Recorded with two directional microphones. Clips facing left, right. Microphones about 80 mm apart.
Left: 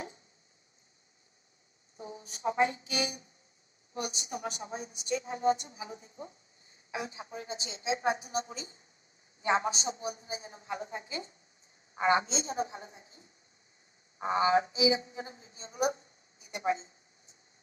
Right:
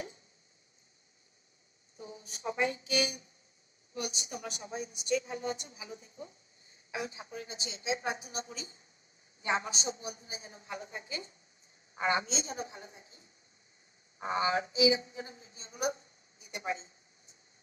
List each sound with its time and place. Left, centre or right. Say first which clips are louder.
2.4 s speech: left 4 dB; left
11.9 s speech: left 4 dB; left
14.2 s a woman's voice: left 4 dB; left